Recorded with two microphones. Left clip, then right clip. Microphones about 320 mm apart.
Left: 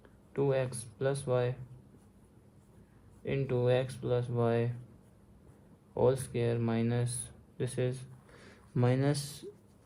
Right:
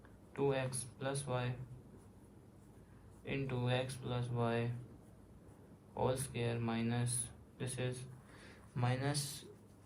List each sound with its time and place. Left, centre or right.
0.3 s speech: left
3.2 s speech: left
5.9 s a man's voice: left